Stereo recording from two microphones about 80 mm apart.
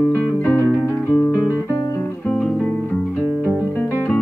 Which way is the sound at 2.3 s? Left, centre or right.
Centre.